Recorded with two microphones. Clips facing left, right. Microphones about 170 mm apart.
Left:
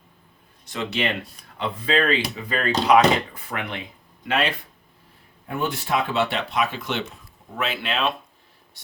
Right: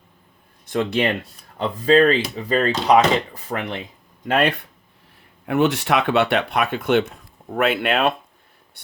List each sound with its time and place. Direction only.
0.6 s speech: 55° right (ahead or behind); by 3.8 s 35° right (ahead or behind)
4.3 s speech: 55° right (ahead or behind)
5.5 s speech: 75° right (ahead or behind); by 8.1 s 55° right (ahead or behind)